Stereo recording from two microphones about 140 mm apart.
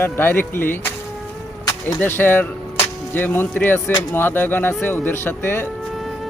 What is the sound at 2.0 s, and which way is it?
Speech, 15° left (ahead or behind).